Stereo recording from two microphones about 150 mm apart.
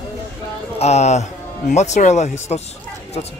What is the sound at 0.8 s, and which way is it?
Speech, 50° left (ahead or behind).